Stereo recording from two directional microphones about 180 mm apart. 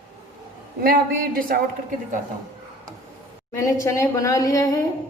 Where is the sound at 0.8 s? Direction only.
55° right (ahead or behind).